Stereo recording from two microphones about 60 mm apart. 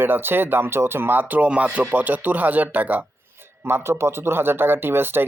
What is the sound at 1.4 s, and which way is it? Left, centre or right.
Speech, right.